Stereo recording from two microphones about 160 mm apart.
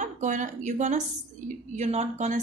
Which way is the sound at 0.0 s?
50° right (ahead or behind).